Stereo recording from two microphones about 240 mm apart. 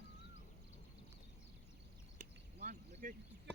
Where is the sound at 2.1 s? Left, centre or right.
Right.